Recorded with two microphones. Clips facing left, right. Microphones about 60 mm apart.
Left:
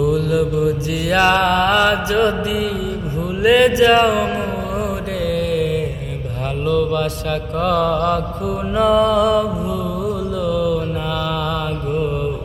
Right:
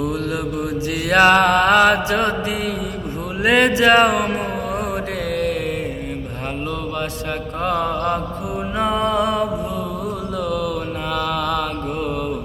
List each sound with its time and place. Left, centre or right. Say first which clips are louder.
0.0 s mantra: left 6 dB; right
3.4 s music: left 2 dB; right
6.7 s mantra: left 11 dB; right
10.1 s mantra: left 4 dB; right